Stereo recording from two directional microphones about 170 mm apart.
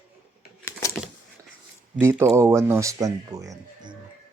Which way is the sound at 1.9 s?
15° right (ahead or behind).